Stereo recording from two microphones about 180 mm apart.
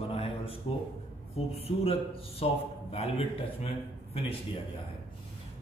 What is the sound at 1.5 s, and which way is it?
A man's voice, 35° left (ahead or behind).